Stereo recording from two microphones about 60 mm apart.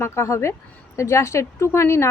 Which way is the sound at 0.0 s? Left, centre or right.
Left.